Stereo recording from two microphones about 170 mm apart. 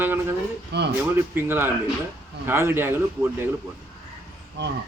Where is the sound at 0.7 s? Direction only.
75° right (ahead or behind).